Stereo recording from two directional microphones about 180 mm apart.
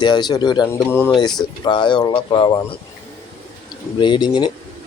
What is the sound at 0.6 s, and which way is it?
Speech, 15° left (ahead or behind).